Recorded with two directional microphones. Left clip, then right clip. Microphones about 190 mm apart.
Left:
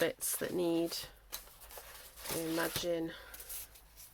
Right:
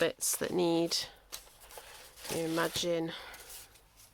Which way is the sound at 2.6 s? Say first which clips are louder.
Right 4 dB; 45° right (ahead or behind).